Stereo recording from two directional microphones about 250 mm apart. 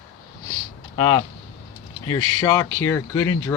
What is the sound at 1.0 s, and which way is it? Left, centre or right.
Speech, centre.